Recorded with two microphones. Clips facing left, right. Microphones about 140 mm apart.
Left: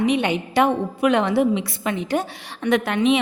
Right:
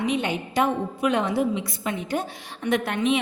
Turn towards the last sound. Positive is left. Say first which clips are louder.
# left 4 dB
turn(degrees=90)